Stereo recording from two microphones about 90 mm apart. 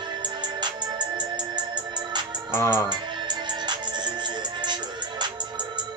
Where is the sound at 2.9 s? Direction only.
55° right (ahead or behind).